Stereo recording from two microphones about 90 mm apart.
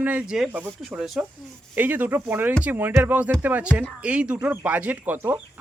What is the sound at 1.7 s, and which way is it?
Speech, 20° right (ahead or behind).